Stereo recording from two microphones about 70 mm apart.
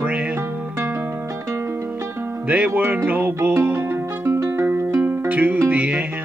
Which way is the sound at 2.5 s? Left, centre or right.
Right.